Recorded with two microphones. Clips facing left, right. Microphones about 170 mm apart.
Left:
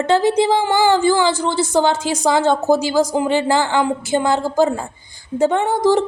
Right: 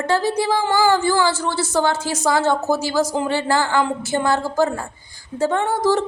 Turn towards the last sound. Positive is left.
turn(degrees=15)  # may be behind; listen again after turning